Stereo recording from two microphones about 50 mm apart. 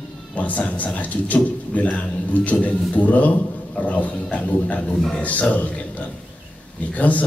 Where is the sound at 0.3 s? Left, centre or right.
Left.